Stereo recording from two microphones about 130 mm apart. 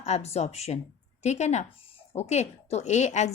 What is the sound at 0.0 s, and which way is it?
A woman's voice, 55° left (ahead or behind).